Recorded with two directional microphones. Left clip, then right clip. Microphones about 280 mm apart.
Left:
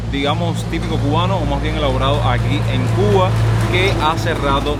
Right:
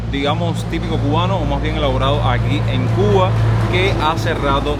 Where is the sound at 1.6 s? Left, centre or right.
Centre.